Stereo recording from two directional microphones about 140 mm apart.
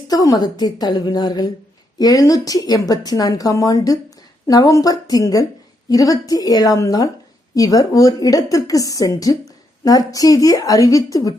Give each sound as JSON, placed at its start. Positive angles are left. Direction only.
{"t": 0.1, "sound": "speech", "side_deg": 30}